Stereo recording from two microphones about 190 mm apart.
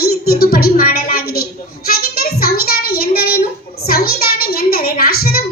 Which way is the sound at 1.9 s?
50° left (ahead or behind).